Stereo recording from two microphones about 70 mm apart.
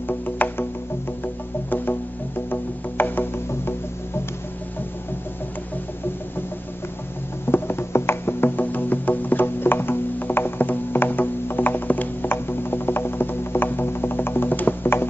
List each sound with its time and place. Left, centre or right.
0.1 s music: left
7.4 s music: left